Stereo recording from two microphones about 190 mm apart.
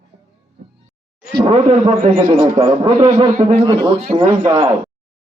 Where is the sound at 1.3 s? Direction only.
30° right (ahead or behind).